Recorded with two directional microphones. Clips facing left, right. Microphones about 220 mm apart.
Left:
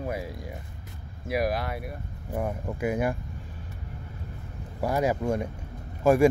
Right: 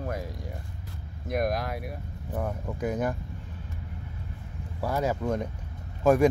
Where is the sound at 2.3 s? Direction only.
10° left (ahead or behind).